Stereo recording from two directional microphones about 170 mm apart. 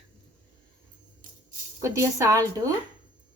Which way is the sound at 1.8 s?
15° right (ahead or behind).